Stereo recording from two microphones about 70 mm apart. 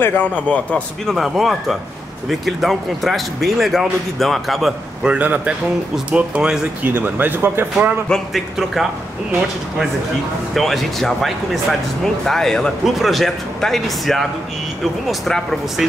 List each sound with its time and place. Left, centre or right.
0.0 s a man's voice: left
1.0 s speech: centre
5.0 s speech: centre
8.3 s speech: centre
10.5 s speech: centre